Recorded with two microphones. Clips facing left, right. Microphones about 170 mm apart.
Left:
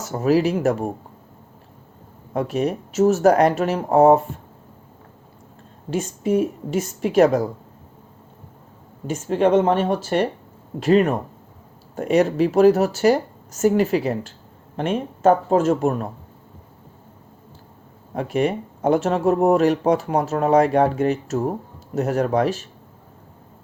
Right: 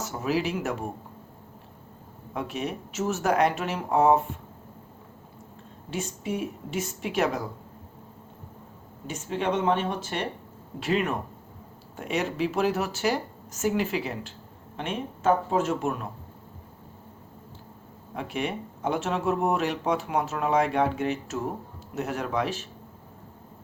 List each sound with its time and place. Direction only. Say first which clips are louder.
0.0 s speech: left 9 dB; 40° left (ahead or behind)
2.3 s speech: left 9 dB; 40° left (ahead or behind)
5.9 s speech: left 10 dB; 45° left (ahead or behind)
9.0 s speech: left 10 dB; 40° left (ahead or behind)
18.1 s speech: left 9 dB; 40° left (ahead or behind)